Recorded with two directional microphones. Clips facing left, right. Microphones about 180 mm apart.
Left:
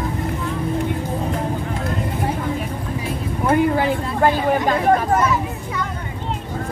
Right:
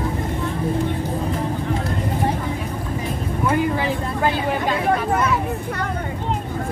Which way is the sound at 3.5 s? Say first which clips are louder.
Left 4 dB; 55° left (ahead or behind).